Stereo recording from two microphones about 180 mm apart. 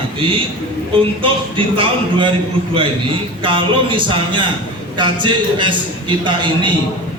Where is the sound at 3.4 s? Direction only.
30° right (ahead or behind).